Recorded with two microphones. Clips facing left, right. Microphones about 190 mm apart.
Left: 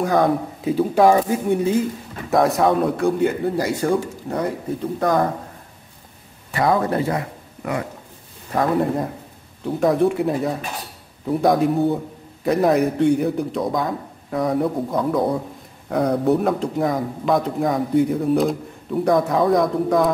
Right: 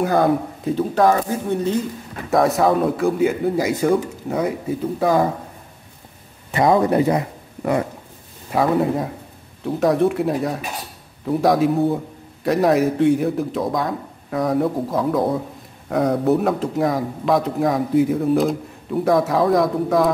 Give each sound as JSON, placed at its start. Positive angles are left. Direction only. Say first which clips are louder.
{"t": 0.0, "sound": "speech", "louder": "right 1 dB", "side_deg": -5}
{"t": 0.7, "sound": "speech", "louder": "left 2 dB", "side_deg": 10}
{"t": 2.3, "sound": "speech", "louder": "even", "side_deg": 0}
{"t": 6.5, "sound": "a man's voice", "louder": "right 3 dB", "side_deg": -20}
{"t": 8.5, "sound": "speech", "louder": "right 1 dB", "side_deg": -5}